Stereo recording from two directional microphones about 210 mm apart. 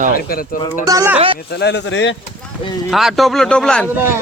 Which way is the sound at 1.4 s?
50° left (ahead or behind).